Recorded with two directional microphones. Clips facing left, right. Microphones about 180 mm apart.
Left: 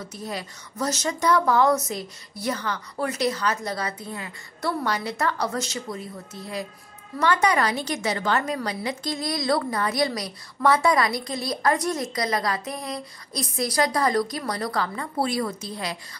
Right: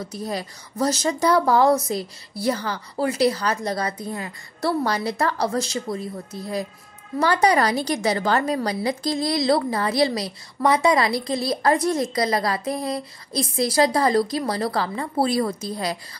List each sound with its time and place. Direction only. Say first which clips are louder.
0.1 s a woman's voice: right 4 dB; 35° right (ahead or behind)
7.2 s a woman's voice: right 3 dB; 35° right (ahead or behind)